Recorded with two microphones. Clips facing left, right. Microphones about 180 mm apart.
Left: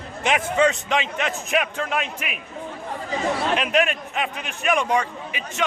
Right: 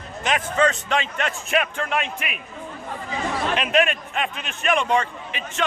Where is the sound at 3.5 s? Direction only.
10° left (ahead or behind).